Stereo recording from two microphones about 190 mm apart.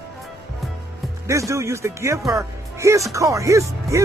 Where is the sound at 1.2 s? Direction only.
15° right (ahead or behind).